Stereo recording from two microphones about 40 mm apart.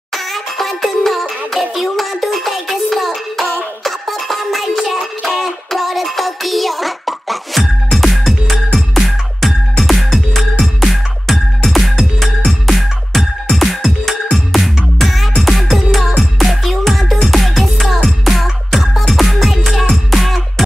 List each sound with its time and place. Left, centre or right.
0.1 s music: centre